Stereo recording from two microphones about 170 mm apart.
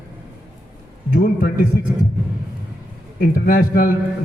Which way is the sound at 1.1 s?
55° left (ahead or behind).